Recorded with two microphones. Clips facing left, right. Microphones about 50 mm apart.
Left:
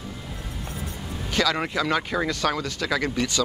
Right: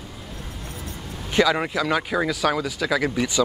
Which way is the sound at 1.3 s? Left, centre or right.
Centre.